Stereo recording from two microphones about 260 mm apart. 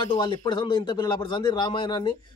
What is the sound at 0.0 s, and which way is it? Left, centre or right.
Speech, centre.